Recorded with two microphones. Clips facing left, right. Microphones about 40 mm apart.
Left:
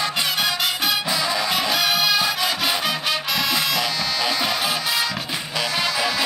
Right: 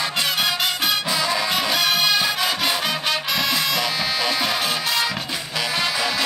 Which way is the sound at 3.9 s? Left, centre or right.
Centre.